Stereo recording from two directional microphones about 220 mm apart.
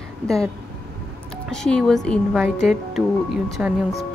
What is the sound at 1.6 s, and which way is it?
Speech, 5° left (ahead or behind).